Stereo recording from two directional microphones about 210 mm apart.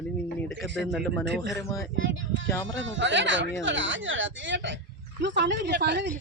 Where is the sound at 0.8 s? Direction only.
Centre (ahead or behind).